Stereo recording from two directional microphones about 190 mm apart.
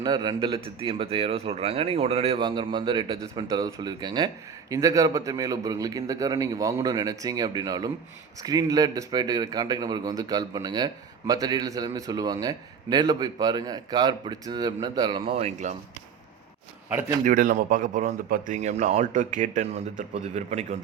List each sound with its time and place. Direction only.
0.0 s a man's voice: 20° right (ahead or behind)
17.2 s speech: 45° right (ahead or behind)